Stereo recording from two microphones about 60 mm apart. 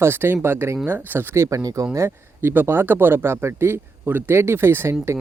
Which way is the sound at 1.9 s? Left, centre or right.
Right.